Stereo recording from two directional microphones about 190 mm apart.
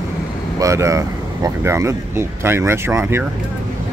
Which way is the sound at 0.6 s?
15° right (ahead or behind).